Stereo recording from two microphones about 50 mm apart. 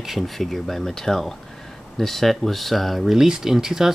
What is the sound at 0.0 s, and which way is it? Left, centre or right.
Speech, centre.